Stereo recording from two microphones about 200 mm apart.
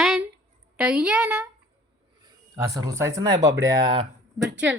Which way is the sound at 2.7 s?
15° right (ahead or behind).